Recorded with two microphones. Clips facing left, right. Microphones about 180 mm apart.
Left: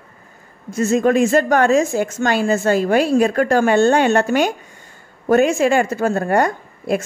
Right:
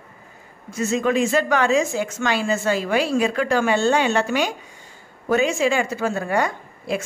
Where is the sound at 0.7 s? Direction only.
45° left (ahead or behind).